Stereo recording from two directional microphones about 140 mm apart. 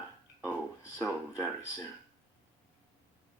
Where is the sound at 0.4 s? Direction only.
20° left (ahead or behind).